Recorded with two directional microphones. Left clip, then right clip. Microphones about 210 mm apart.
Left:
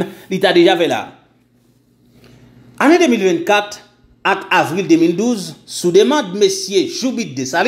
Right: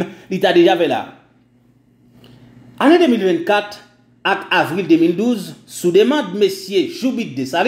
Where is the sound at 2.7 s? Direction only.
20° left (ahead or behind).